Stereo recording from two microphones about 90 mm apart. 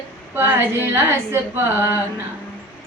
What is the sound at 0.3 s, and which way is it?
Speech, 25° right (ahead or behind).